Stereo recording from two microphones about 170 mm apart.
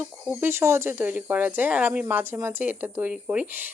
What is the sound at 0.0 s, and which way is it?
Speech, 10° right (ahead or behind).